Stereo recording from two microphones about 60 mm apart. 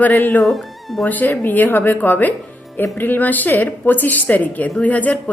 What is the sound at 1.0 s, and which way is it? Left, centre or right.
A woman's voice, left.